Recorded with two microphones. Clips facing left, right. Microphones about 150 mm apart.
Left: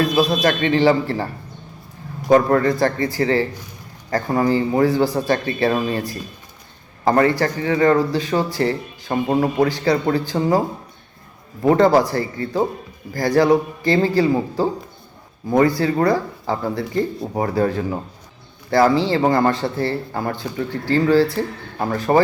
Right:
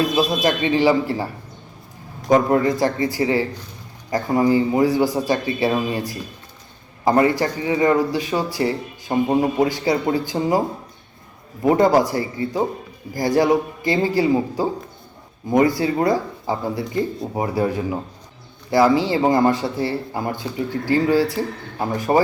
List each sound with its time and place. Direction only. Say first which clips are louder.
0.4 s a man's voice: even; 15° right (ahead or behind)
2.3 s a man's voice: left 1 dB; 15° right (ahead or behind)
7.0 s a man's voice: left 1 dB; 15° right (ahead or behind)
11.6 s a man's voice: left 1 dB; 15° right (ahead or behind)